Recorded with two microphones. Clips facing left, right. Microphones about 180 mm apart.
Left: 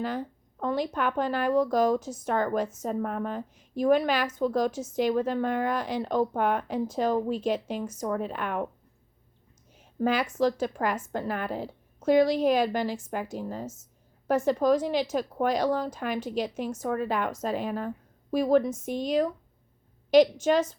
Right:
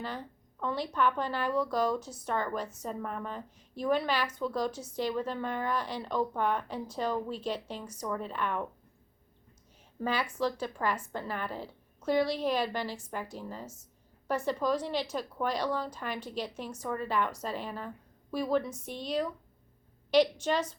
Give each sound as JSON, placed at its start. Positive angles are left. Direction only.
{"t": 0.0, "sound": "a woman's voice", "side_deg": 45}
{"t": 7.2, "sound": "a woman's voice", "side_deg": 15}
{"t": 7.4, "sound": "a woman's voice", "side_deg": 45}
{"t": 10.0, "sound": "a woman's voice", "side_deg": 45}
{"t": 11.5, "sound": "a sound", "side_deg": 15}
{"t": 12.0, "sound": "a woman's voice", "side_deg": 45}